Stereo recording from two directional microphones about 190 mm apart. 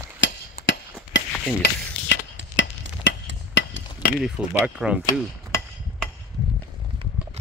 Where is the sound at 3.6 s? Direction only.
70° left (ahead or behind).